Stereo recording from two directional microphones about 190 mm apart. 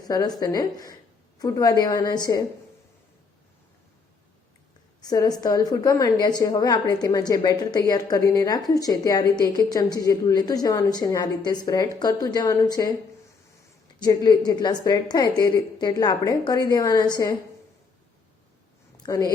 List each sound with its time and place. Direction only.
0.1 s a woman's voice: 20° left (ahead or behind)
4.9 s a woman's voice: 20° left (ahead or behind)
14.0 s a woman's voice: 20° left (ahead or behind)
19.0 s speech: 20° left (ahead or behind)